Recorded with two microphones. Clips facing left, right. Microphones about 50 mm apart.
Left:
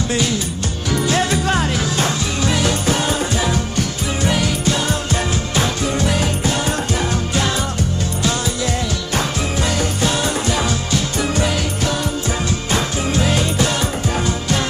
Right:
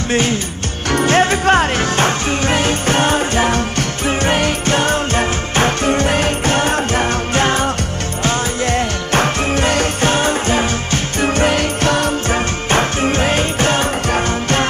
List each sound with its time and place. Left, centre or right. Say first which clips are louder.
0.1 s music: right 3 dB; right